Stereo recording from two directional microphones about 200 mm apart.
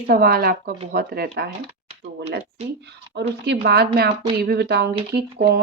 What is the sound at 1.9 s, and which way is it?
Typing, 30° right (ahead or behind).